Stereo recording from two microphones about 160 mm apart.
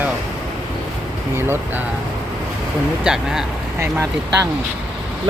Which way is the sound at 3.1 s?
5° right (ahead or behind).